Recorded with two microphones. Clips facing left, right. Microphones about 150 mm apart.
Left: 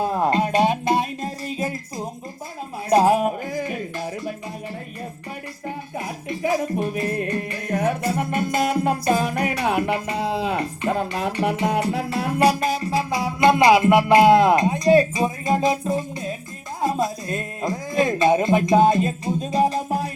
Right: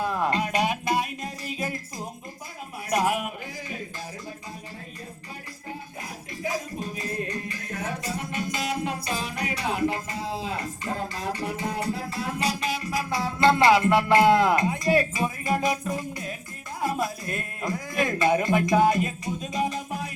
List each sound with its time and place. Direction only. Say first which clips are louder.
0.0 s speech: left 5 dB; 35° left (ahead or behind)
2.9 s speech: left 9 dB; 30° left (ahead or behind)
3.4 s speech: left 9 dB; 55° left (ahead or behind); by 4.4 s 70° left (ahead or behind)
6.0 s music: left 9 dB; 65° left (ahead or behind); by 13.1 s 30° left (ahead or behind)
13.1 s music: left 3 dB; 15° left (ahead or behind)
16.8 s speech: left 5 dB; 25° left (ahead or behind)